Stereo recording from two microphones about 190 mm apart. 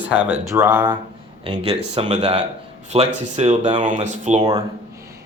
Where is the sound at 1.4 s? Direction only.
30° right (ahead or behind).